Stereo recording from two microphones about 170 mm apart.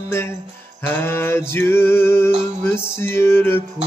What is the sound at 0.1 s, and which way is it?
Music, 15° left (ahead or behind).